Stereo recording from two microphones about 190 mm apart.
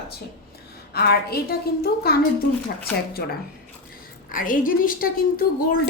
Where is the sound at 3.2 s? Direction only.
55° left (ahead or behind).